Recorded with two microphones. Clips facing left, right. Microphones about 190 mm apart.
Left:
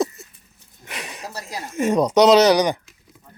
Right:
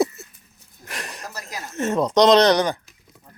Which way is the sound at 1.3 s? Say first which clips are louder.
Left 3 dB; 30° left (ahead or behind).